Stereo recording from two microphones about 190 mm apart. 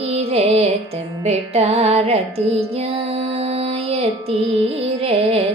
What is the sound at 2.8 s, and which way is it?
Music, 30° right (ahead or behind).